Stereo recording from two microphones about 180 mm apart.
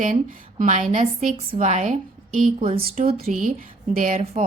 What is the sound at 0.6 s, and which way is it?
A woman's voice, 40° right (ahead or behind).